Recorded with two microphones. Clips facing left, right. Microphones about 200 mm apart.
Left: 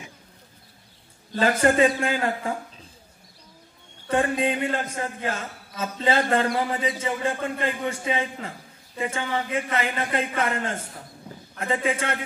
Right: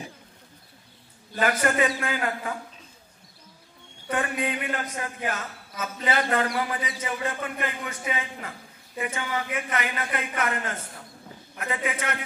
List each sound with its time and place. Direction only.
1.4 s a man's voice: 25° left (ahead or behind)
4.1 s a man's voice: 30° left (ahead or behind)